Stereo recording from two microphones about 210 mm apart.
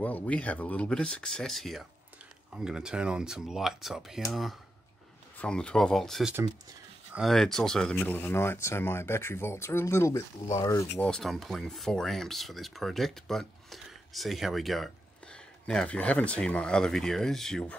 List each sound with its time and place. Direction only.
0.0 s speech: 5° left (ahead or behind)
11.0 s speech: 5° left (ahead or behind)